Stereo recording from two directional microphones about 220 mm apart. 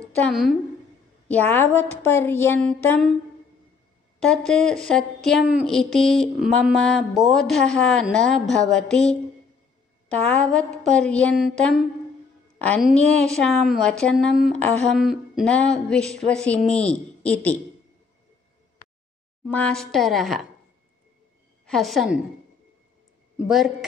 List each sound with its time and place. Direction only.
0.3 s a woman's voice: centre (ahead or behind)
4.2 s speech: 5° left (ahead or behind)
19.4 s speech: 5° left (ahead or behind)
21.6 s speech: centre (ahead or behind)
23.3 s a woman's voice: 5° right (ahead or behind)